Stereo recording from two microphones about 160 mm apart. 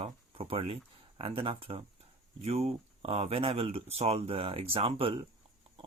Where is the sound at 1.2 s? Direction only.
35° right (ahead or behind).